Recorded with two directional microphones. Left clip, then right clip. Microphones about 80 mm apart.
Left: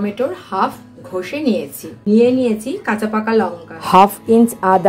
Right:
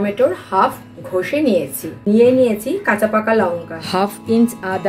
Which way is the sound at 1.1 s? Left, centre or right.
Centre.